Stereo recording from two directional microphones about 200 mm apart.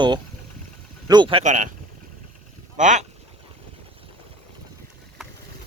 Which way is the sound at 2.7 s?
35° right (ahead or behind).